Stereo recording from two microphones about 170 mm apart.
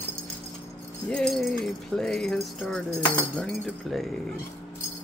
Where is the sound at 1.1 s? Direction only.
Centre (ahead or behind).